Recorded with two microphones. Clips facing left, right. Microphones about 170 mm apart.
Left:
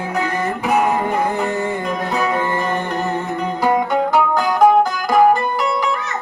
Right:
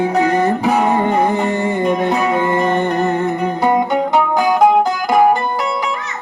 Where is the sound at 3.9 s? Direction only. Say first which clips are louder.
Right 1 dB; 20° right (ahead or behind).